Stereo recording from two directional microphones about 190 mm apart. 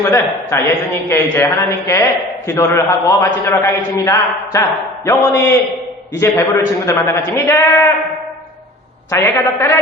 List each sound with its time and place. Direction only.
0.0 s a man's voice: 15° left (ahead or behind)
9.0 s a man's voice: 15° left (ahead or behind)